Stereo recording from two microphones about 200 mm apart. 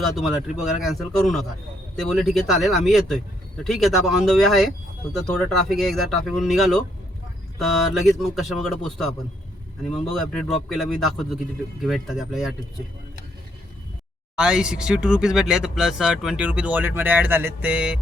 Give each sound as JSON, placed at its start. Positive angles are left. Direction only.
{"t": 0.2, "sound": "speech", "side_deg": 0}
{"t": 14.3, "sound": "speech", "side_deg": -5}